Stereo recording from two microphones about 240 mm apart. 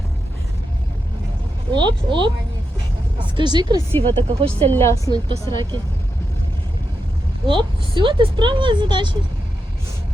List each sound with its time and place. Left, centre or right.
1.7 s speech: centre
3.3 s a woman's voice: centre
3.9 s a woman's voice: centre
5.0 s a woman's voice: centre
7.4 s speech: centre